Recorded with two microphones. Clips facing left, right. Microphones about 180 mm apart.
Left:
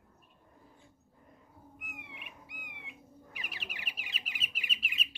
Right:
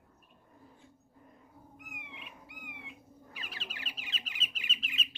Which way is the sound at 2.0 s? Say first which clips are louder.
Right 1 dB; 15° left (ahead or behind).